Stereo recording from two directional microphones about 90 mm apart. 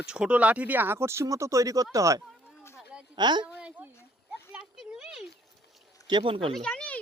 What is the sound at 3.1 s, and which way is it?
Speech, 55° right (ahead or behind).